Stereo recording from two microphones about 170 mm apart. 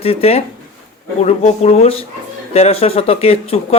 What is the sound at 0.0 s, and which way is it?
A man's voice, 35° left (ahead or behind).